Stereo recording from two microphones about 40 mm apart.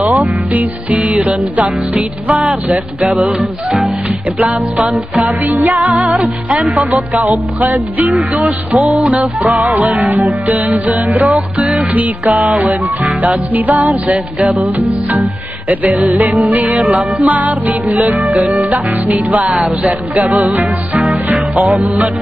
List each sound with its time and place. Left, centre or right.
0.0 s music: right
5.2 s music: right
15.7 s music: right